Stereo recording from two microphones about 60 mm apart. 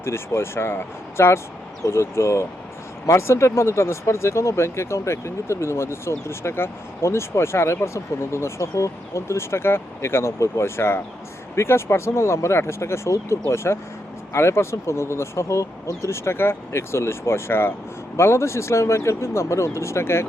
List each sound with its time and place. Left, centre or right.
0.0 s speech: left